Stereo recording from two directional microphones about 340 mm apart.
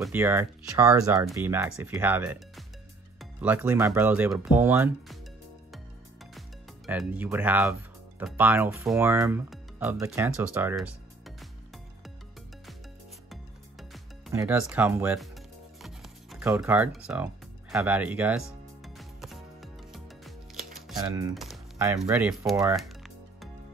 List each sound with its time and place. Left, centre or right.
0.0 s speech: centre
6.9 s speech: centre
13.3 s music: centre
15.8 s speech: centre
18.9 s music: centre